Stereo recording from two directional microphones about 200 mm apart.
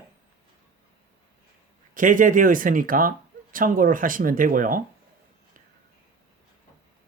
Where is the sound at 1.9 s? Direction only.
40° right (ahead or behind).